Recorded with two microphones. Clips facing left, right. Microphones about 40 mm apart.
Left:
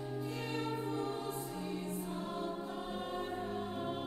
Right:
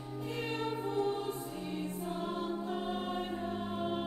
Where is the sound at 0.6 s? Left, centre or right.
Right.